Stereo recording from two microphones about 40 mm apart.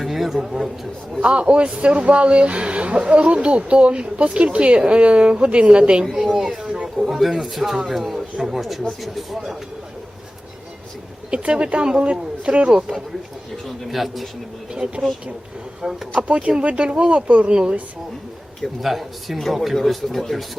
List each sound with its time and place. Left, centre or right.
0.0 s a sound: centre
1.2 s speech: right
6.3 s a man's voice: centre
11.3 s speech: right
13.8 s a man's voice: centre
14.8 s speech: right
15.8 s a man's voice: centre
16.1 s speech: right
18.8 s a man's voice: centre